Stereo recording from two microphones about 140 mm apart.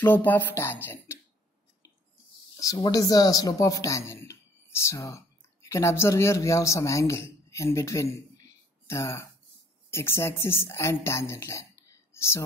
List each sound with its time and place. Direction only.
0.0 s speech: 10° left (ahead or behind)
2.6 s speech: 25° left (ahead or behind)